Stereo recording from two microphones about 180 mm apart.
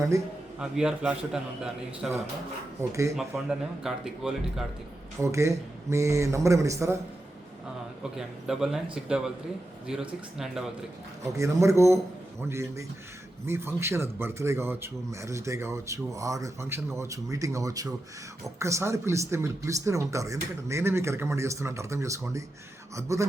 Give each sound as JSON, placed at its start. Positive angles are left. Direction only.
{"t": 0.6, "sound": "a man's voice", "side_deg": -5}
{"t": 2.9, "sound": "speech", "side_deg": -15}
{"t": 3.2, "sound": "a man's voice", "side_deg": 0}
{"t": 5.2, "sound": "speech", "side_deg": -15}
{"t": 8.1, "sound": "a man's voice", "side_deg": 0}
{"t": 11.2, "sound": "speech", "side_deg": -15}